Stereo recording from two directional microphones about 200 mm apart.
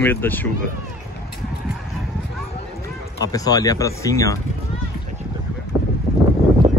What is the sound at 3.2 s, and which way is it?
A man's voice, 20° left (ahead or behind).